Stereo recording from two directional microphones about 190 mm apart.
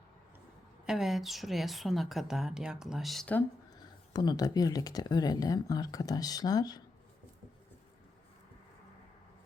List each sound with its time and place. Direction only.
0.9 s a woman's voice: centre (ahead or behind)
3.8 s speech: 20° left (ahead or behind)